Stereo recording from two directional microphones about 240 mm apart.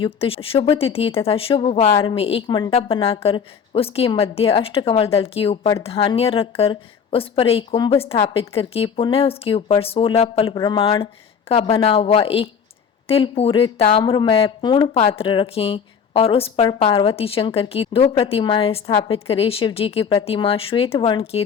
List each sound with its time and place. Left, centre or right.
0.0 s speech: left
1.9 s a woman's voice: centre
2.1 s a woman's voice: left
19.1 s speech: left